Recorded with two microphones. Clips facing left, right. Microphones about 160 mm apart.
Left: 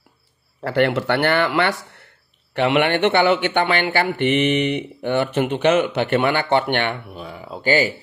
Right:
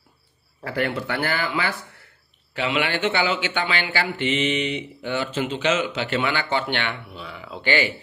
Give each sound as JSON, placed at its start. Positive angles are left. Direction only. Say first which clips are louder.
{"t": 0.7, "sound": "speech", "louder": "left 7 dB", "side_deg": 75}
{"t": 2.5, "sound": "speech", "louder": "left 7 dB", "side_deg": 60}